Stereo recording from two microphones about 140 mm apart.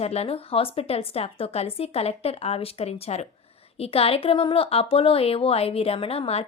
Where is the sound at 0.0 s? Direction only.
45° left (ahead or behind).